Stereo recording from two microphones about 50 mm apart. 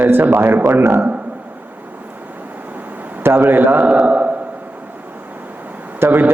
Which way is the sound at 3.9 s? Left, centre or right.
Right.